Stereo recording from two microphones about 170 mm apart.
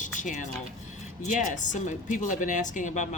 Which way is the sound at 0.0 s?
45° left (ahead or behind).